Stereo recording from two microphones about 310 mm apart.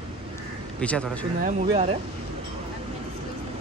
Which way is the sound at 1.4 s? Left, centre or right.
Right.